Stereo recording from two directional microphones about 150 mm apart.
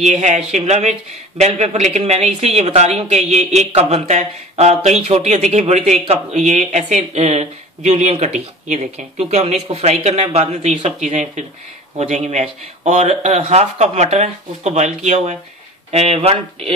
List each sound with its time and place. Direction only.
0.0 s speech: 50° right (ahead or behind)